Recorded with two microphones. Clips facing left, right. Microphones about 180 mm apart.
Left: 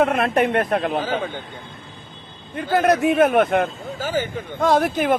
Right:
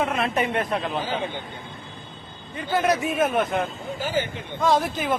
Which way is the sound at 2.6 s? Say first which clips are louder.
Left 5 dB; 60° left (ahead or behind).